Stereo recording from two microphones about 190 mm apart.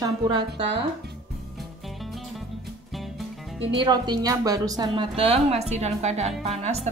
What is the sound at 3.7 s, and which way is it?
A woman's voice, 25° right (ahead or behind).